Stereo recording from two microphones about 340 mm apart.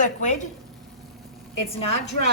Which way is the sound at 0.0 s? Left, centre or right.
Left.